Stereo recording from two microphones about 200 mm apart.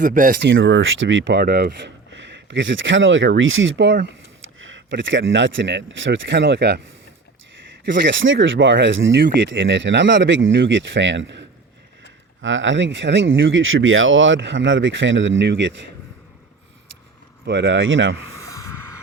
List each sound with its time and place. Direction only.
0.0 s speech: 40° right (ahead or behind)
0.3 s speech: 65° right (ahead or behind)
2.1 s speech: 65° right (ahead or behind)
7.9 s speech: 65° right (ahead or behind)
17.4 s speech: 65° right (ahead or behind)
18.3 s a sound: 15° left (ahead or behind)